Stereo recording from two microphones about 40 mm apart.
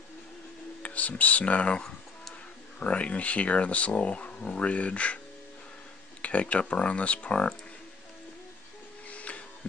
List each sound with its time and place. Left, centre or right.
0.8 s speech: left
2.8 s speech: left
6.2 s speech: left
9.1 s a sound: left